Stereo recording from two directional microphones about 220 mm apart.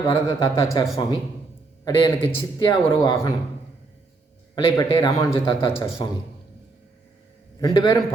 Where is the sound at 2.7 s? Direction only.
20° left (ahead or behind).